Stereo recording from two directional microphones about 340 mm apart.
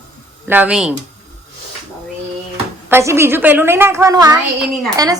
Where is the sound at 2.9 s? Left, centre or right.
Centre.